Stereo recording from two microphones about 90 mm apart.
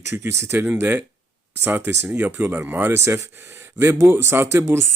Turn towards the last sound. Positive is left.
turn(degrees=-25)  # may be behind; listen again after turning